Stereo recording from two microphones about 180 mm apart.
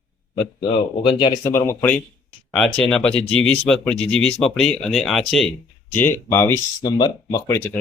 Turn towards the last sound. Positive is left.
turn(degrees=15)  # may be behind; listen again after turning